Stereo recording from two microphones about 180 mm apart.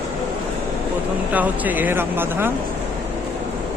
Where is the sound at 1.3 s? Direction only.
10° right (ahead or behind).